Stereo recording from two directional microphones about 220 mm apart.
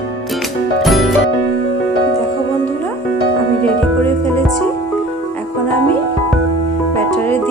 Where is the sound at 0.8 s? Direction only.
Centre (ahead or behind).